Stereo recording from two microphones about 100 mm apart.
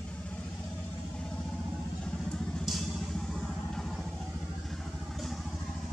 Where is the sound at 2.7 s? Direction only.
5° right (ahead or behind).